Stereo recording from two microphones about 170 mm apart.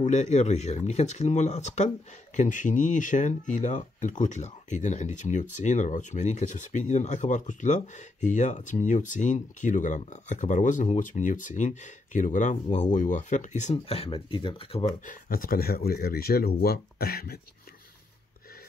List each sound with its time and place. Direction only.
0.0 s speech: 45° left (ahead or behind)
15.0 s speech: 55° left (ahead or behind)